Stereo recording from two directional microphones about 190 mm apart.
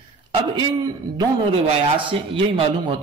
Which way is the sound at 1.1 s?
25° right (ahead or behind).